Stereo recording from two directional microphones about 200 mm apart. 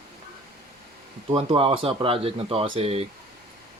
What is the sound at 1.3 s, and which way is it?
Speech, 30° right (ahead or behind).